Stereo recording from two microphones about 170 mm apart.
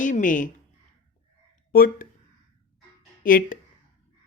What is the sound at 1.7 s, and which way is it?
Speech, 55° left (ahead or behind).